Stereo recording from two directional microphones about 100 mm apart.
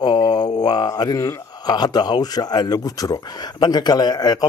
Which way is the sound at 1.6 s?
45° left (ahead or behind).